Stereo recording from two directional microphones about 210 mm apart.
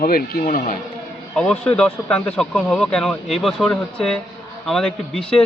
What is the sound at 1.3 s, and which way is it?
Speech, 5° left (ahead or behind).